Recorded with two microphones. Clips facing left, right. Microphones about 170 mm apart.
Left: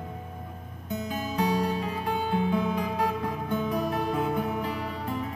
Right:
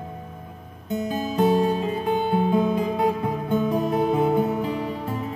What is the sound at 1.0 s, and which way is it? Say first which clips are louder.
Music: right 7 dB; 20° right (ahead or behind).